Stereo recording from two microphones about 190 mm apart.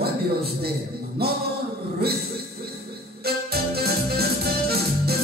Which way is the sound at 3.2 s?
55° right (ahead or behind).